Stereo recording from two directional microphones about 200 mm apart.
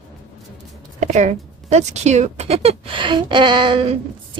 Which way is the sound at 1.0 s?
35° right (ahead or behind).